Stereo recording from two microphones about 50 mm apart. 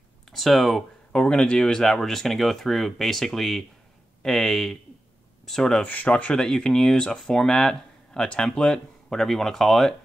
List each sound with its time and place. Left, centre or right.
0.3 s speech: centre
1.1 s speech: centre
5.9 s speech: left
6.3 s speech: centre
9.1 s speech: centre